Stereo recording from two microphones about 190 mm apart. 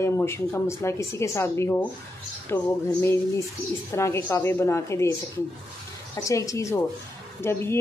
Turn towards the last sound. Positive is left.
turn(degrees=15)  # may be behind; listen again after turning